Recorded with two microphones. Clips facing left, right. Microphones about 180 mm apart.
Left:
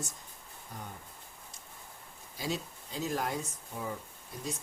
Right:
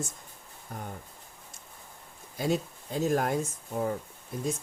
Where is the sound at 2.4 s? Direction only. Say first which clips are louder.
Right 7 dB; 50° right (ahead or behind).